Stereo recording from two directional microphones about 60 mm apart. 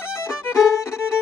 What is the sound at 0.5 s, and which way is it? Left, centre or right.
Violin, left.